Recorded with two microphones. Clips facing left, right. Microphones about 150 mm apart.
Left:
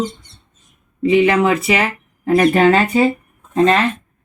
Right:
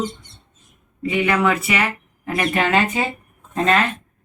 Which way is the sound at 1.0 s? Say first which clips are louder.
Left 6 dB; 30° left (ahead or behind).